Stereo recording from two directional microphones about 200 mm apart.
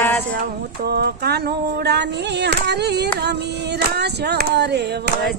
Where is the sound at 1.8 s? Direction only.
55° right (ahead or behind).